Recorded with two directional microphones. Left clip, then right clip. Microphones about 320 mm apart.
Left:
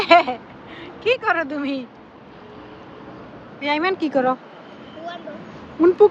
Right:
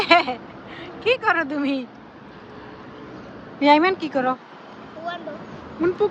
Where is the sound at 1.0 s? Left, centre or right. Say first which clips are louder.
Even; centre.